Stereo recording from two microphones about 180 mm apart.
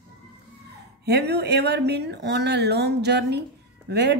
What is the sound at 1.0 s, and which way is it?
A woman's voice, 65° right (ahead or behind).